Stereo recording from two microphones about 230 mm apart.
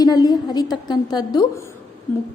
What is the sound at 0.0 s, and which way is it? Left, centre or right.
A woman's voice, centre.